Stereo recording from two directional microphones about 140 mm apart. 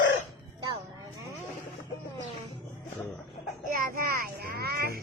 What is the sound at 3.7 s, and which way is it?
Child singing, 90° right.